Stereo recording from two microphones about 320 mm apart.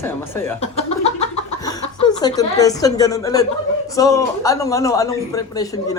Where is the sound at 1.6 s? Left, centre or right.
Centre.